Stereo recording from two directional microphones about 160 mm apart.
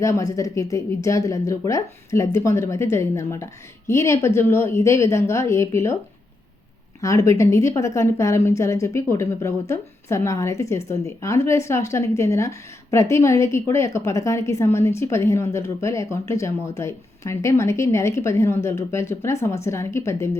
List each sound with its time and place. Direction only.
0.0 s a woman's voice: 20° left (ahead or behind)
7.0 s a woman's voice: 20° left (ahead or behind)